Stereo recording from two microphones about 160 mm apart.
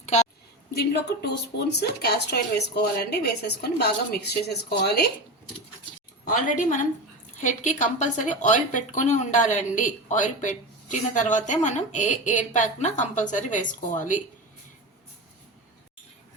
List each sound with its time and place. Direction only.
0.0 s a sound: 45° left (ahead or behind)
0.7 s a woman's voice: 90° left
6.6 s speech: 55° left (ahead or behind)